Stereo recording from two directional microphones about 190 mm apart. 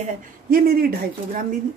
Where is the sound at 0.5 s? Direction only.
50° right (ahead or behind).